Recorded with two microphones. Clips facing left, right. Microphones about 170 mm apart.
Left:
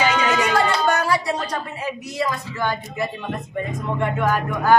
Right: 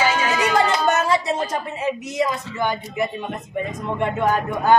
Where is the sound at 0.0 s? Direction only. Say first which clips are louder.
Left 1 dB; 15° left (ahead or behind).